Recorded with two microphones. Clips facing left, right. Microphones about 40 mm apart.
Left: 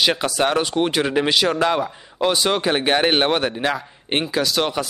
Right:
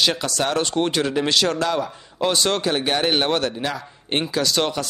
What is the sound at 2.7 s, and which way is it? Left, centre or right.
A man's voice, left.